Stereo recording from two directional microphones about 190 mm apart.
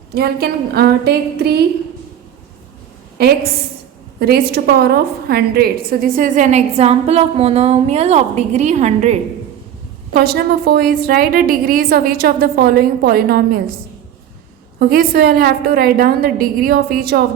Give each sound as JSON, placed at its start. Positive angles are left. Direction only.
{"t": 0.1, "sound": "a woman's voice", "side_deg": -55}
{"t": 3.2, "sound": "a woman's voice", "side_deg": -55}
{"t": 10.2, "sound": "a woman's voice", "side_deg": -55}
{"t": 14.8, "sound": "a woman's voice", "side_deg": -50}